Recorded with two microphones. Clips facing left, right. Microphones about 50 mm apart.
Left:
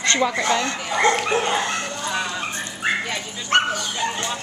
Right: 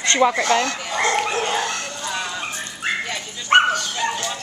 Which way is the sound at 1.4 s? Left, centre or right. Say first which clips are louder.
Left 1 dB; centre.